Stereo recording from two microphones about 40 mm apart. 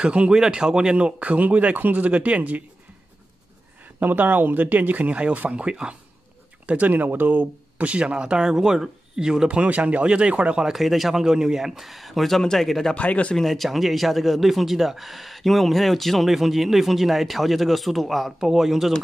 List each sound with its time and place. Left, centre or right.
0.0 s speech: right
0.3 s speech: centre
1.2 s speech: right
4.0 s speech: right
5.6 s speech: right
6.9 s speech: right
8.0 s speech: right
9.5 s speech: right
10.7 s speech: centre
11.2 s speech: centre
12.9 s speech: left
13.4 s speech: centre